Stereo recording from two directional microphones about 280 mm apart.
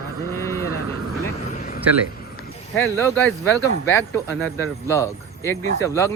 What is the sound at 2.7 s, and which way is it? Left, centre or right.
Speech, centre.